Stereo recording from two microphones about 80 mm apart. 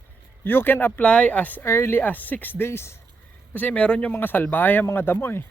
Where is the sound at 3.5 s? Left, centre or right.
Left.